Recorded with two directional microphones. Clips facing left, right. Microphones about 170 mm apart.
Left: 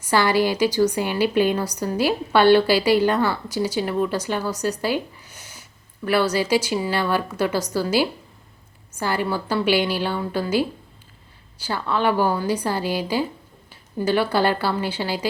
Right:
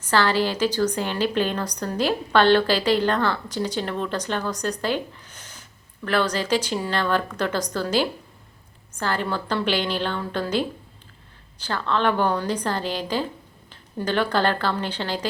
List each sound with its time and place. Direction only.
0.0 s a woman's voice: 10° left (ahead or behind)